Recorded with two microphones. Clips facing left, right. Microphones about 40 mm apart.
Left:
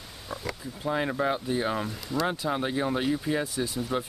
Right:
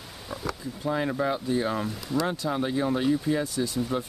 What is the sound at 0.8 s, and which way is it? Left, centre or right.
Speech, centre.